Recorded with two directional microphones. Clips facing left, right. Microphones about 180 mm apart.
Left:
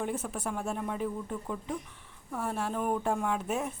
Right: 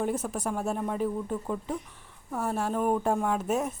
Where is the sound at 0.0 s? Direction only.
40° right (ahead or behind).